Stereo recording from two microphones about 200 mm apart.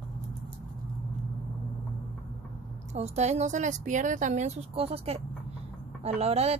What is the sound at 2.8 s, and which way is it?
A woman's voice, 35° right (ahead or behind).